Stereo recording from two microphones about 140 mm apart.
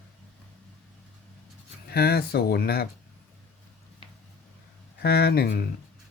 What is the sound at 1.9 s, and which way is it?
Speech, 90° left.